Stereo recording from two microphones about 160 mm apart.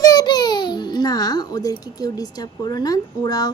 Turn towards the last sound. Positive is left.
turn(degrees=25)  # may be behind; listen again after turning